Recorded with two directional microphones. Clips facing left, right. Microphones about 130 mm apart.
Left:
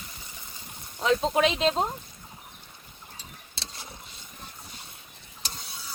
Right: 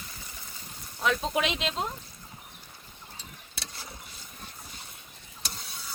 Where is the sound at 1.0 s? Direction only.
30° left (ahead or behind).